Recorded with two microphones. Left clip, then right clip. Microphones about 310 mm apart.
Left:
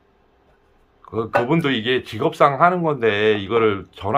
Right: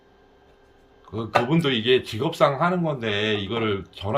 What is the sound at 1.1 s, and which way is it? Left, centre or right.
Speech, centre.